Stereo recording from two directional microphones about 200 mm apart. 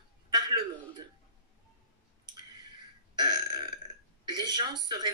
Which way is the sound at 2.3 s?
20° right (ahead or behind).